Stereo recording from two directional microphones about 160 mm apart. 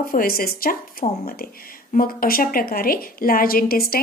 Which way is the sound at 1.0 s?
45° left (ahead or behind).